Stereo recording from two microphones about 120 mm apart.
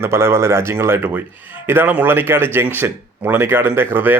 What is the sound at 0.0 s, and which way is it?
Speech, 20° right (ahead or behind).